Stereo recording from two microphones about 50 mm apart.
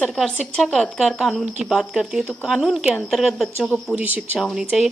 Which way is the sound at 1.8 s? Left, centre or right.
Centre.